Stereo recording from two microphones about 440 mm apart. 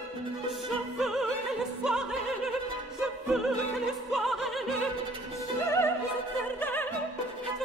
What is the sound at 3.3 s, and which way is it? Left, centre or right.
Opera, centre.